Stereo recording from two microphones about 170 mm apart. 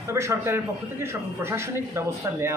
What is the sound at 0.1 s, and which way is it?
Speech, 15° right (ahead or behind).